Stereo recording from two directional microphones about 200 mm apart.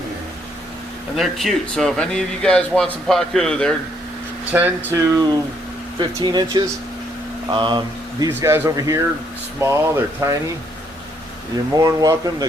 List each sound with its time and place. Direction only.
1.1 s speech: centre (ahead or behind)
4.5 s speech: 10° right (ahead or behind)
8.3 s speech: 10° right (ahead or behind)
11.8 s speech: 20° right (ahead or behind)